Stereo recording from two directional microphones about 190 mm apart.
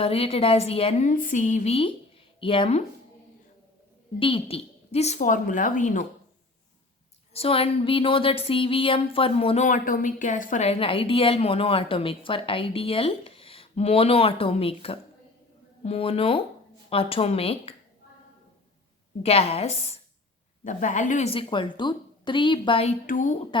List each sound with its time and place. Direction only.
0.0 s a woman's voice: 30° left (ahead or behind)
4.2 s a woman's voice: 30° left (ahead or behind)
7.3 s a woman's voice: 30° left (ahead or behind)
19.2 s a woman's voice: 30° left (ahead or behind)